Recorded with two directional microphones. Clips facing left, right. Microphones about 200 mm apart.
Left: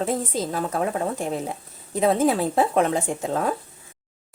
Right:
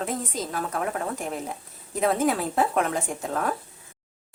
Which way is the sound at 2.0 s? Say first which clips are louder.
Left 4 dB; 25° left (ahead or behind).